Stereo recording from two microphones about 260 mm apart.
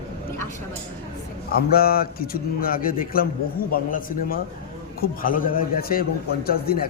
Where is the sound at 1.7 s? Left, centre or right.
Left.